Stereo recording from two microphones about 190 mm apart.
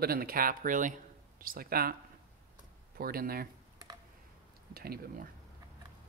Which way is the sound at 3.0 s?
50° right (ahead or behind).